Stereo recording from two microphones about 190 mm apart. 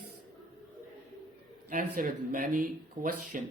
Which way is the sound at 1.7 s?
45° right (ahead or behind).